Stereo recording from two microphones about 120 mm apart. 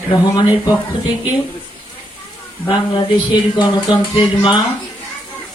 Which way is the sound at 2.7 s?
40° left (ahead or behind).